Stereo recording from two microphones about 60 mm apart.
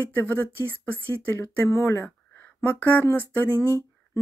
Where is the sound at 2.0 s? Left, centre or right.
Left.